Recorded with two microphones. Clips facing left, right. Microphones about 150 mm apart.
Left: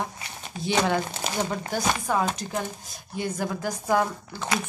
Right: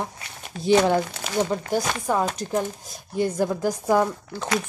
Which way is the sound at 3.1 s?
35° right (ahead or behind).